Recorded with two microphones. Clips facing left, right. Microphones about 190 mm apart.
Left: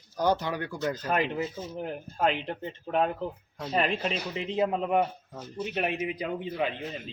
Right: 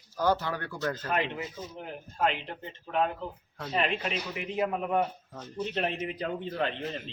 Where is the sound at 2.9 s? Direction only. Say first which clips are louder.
Left 2 dB; 40° left (ahead or behind); by 5.0 s 20° left (ahead or behind).